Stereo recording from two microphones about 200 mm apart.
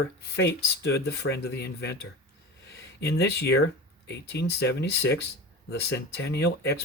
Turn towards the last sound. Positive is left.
turn(degrees=55)  # may be behind; listen again after turning